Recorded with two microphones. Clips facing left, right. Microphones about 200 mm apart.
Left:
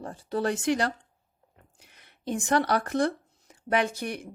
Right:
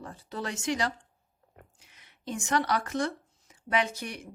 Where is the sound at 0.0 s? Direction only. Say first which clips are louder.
Left 8 dB; 50° left (ahead or behind).